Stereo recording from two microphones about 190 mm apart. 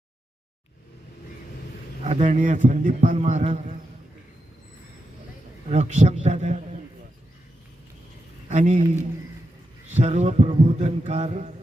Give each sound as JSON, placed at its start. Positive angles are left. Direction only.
{"t": 2.0, "sound": "a man's voice", "side_deg": -40}
{"t": 5.6, "sound": "a man's voice", "side_deg": -35}
{"t": 8.4, "sound": "a man's voice", "side_deg": -40}